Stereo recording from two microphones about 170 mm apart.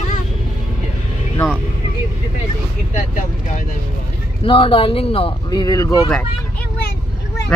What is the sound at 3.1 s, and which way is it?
Speech, 50° left (ahead or behind).